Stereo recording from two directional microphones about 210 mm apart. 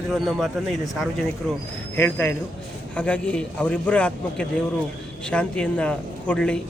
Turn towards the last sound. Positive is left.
turn(degrees=5)  # may be behind; listen again after turning